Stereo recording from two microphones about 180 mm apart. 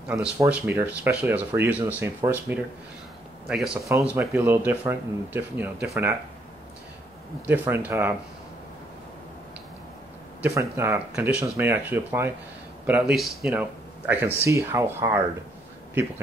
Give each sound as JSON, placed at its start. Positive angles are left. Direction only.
{"t": 0.1, "sound": "speech", "side_deg": -10}
{"t": 7.4, "sound": "speech", "side_deg": -10}
{"t": 10.4, "sound": "a man's voice", "side_deg": -15}